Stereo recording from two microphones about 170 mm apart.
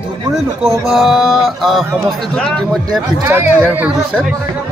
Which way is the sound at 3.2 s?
15° right (ahead or behind).